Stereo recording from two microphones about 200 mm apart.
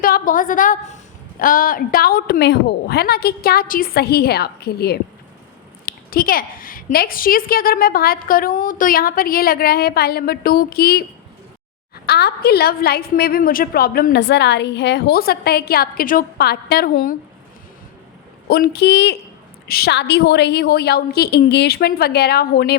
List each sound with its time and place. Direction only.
0.0 s a woman's voice: 45° left (ahead or behind)
12.0 s a woman's voice: 55° left (ahead or behind)
18.4 s a woman's voice: 50° left (ahead or behind)